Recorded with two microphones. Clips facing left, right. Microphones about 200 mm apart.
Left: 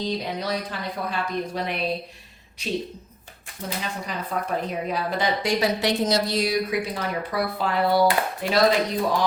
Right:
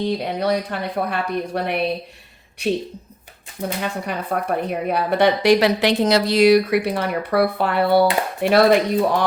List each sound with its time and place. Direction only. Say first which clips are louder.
0.0 s speech: right 6 dB; 60° right (ahead or behind)
4.0 s speech: right 5 dB; 60° right (ahead or behind)